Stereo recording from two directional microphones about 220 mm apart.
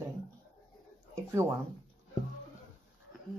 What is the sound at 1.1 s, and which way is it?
Speech, 15° right (ahead or behind).